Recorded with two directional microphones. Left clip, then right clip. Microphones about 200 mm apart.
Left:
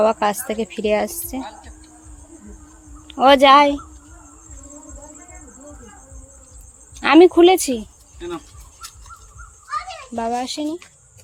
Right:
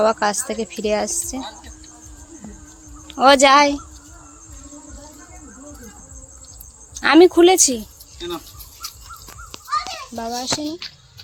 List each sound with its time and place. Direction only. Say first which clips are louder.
0.0 s a woman's voice: even; 5° left (ahead or behind)
3.1 s a woman's voice: left 1 dB; centre (ahead or behind)
6.9 s speech: left 1 dB; 5° left (ahead or behind)
10.2 s a child's voice: left 2 dB; 15° left (ahead or behind)